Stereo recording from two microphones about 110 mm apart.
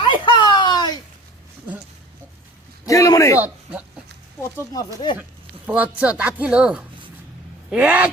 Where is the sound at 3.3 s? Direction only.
15° right (ahead or behind).